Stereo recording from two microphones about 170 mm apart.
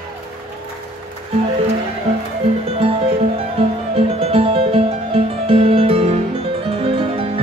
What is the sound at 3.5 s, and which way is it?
Music, 35° right (ahead or behind).